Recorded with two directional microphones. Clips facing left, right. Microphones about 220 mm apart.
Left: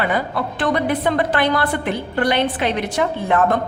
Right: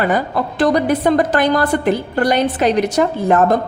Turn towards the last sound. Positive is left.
turn(degrees=-40)  # may be behind; listen again after turning